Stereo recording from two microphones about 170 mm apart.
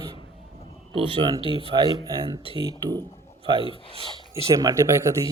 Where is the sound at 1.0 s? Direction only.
25° right (ahead or behind).